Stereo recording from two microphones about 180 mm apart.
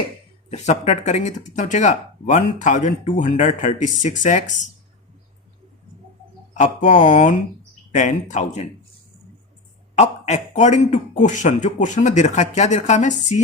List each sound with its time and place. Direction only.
0.5 s speech: 40° left (ahead or behind)
6.5 s speech: 45° left (ahead or behind)
9.9 s a man's voice: 40° left (ahead or behind)